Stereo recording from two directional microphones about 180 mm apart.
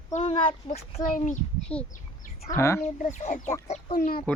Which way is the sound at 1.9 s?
45° left (ahead or behind).